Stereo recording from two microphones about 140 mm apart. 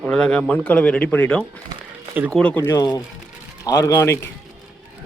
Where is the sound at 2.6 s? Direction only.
25° left (ahead or behind).